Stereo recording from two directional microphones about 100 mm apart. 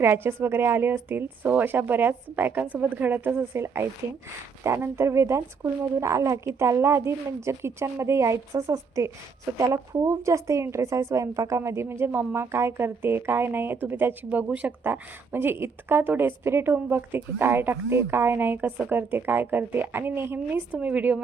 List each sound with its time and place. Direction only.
0.0 s a woman's voice: 25° right (ahead or behind)